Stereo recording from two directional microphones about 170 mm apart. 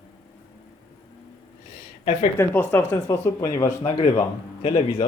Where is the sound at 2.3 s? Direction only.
15° left (ahead or behind).